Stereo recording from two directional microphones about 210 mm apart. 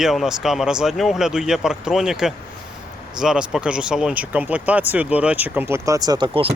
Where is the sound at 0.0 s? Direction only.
Centre (ahead or behind).